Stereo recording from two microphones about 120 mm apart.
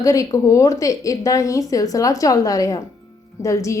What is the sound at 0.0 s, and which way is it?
A woman's voice, 30° left (ahead or behind).